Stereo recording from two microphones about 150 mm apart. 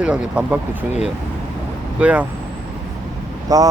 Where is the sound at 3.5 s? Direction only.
25° right (ahead or behind).